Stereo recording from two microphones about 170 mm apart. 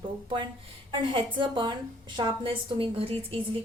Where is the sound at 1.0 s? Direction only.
30° right (ahead or behind).